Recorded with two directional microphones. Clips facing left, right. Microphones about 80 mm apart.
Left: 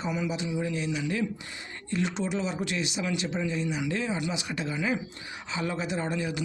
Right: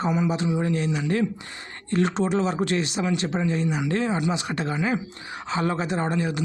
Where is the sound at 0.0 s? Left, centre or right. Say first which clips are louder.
Right 7 dB; right.